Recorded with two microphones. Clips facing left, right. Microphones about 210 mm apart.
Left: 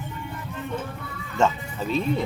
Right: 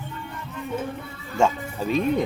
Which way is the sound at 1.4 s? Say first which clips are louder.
Right 1 dB; 10° right (ahead or behind).